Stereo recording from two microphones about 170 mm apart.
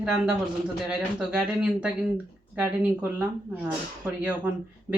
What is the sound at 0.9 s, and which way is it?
Speech, 5° right (ahead or behind).